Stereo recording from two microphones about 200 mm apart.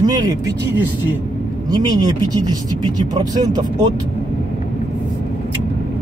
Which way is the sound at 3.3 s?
20° right (ahead or behind).